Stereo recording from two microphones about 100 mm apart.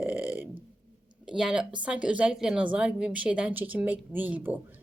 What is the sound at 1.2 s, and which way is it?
A woman's voice, 5° right (ahead or behind).